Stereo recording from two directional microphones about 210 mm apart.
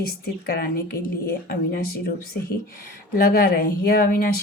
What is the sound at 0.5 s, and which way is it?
Speech, 45° left (ahead or behind).